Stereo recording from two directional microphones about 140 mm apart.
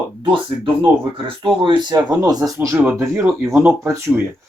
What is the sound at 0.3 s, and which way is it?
Speech, 35° right (ahead or behind).